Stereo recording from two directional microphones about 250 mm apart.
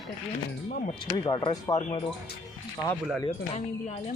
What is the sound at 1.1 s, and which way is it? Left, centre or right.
Speech, centre.